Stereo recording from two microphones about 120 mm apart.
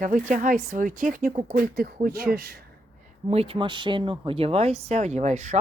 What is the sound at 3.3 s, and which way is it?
Speech, 55° right (ahead or behind).